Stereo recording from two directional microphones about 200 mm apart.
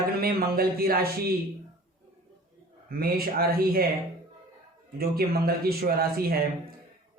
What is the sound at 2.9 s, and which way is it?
A man's voice, 50° right (ahead or behind).